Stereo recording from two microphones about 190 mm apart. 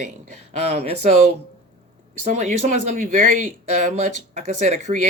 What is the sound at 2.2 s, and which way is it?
Speech, 35° right (ahead or behind).